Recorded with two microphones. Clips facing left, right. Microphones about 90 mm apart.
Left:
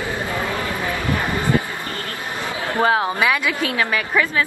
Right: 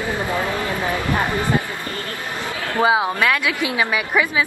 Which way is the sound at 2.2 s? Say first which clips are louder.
Left 1 dB; 20° left (ahead or behind).